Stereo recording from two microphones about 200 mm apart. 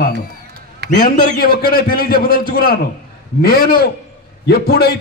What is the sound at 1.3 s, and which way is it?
A man's voice, 50° left (ahead or behind).